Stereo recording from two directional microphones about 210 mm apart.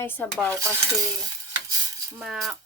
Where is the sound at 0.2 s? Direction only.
5° left (ahead or behind).